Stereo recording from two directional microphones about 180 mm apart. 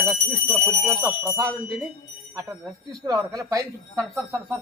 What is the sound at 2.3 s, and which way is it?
Speech, 20° right (ahead or behind).